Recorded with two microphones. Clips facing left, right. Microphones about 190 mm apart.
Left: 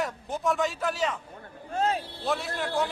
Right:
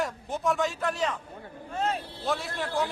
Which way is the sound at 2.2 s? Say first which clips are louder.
Right 1 dB; centre (ahead or behind).